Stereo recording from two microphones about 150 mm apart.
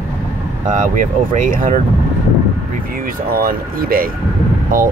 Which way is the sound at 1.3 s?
60° right (ahead or behind).